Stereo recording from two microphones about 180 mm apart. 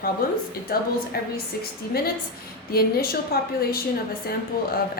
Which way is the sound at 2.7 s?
55° left (ahead or behind).